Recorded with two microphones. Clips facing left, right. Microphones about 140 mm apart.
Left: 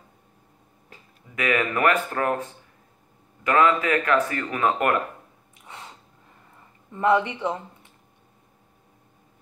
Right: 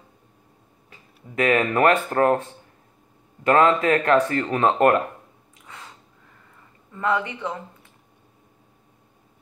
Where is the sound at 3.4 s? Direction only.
35° right (ahead or behind).